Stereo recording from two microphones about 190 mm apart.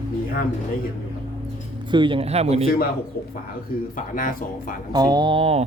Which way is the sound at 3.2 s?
55° left (ahead or behind).